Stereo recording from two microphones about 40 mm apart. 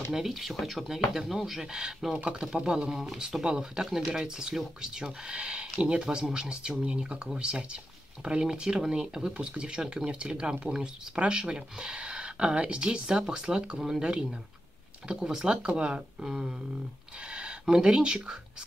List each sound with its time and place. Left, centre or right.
0.1 s speech: centre
15.0 s speech: centre
17.3 s speech: right